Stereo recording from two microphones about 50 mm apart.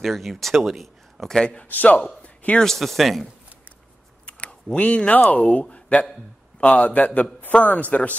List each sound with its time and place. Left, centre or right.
0.0 s speech: centre
1.2 s a man's voice: centre
1.6 s a man's voice: left
2.2 s a sound: left
2.6 s speech: centre
4.3 s a sound: left
5.3 s a man's voice: left